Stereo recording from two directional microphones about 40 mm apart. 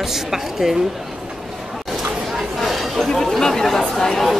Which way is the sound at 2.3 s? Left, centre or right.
Centre.